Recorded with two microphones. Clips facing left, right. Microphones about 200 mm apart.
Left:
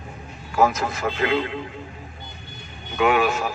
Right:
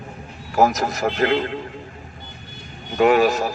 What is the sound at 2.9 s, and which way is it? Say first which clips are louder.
Speech: right 4 dB; 40° right (ahead or behind).